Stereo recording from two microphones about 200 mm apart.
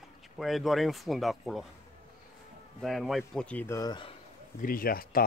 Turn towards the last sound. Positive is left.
turn(degrees=45)  # may be behind; listen again after turning